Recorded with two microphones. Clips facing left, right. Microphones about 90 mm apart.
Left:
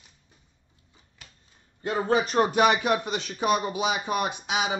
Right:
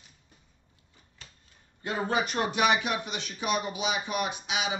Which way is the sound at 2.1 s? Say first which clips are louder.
Left 7 dB; 35° left (ahead or behind).